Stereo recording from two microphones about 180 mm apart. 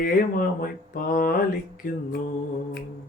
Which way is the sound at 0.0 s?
50° left (ahead or behind).